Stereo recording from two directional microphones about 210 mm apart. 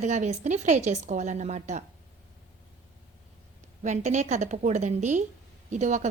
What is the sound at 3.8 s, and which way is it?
A woman's voice, 35° right (ahead or behind).